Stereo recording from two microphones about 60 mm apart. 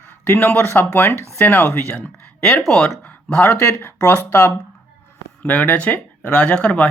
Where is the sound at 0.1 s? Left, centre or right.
Left.